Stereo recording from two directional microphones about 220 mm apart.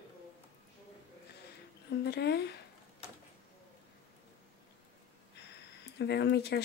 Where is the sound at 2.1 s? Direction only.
50° left (ahead or behind).